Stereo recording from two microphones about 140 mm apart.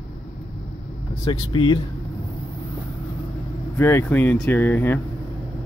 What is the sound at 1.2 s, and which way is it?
Speech, 30° left (ahead or behind).